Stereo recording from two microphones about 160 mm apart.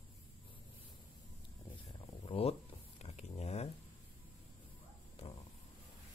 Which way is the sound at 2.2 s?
35° left (ahead or behind).